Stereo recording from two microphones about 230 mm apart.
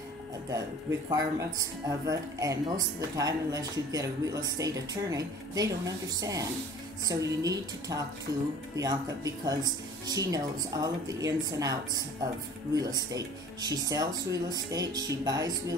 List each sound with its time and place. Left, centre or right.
1.1 s speech: centre
8.3 s speech: right
8.7 s speech: centre